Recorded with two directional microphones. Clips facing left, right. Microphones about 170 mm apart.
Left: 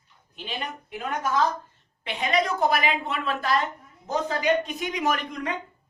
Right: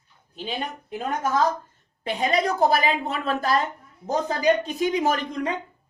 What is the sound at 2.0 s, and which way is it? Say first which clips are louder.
Speech: right 2 dB; 40° right (ahead or behind).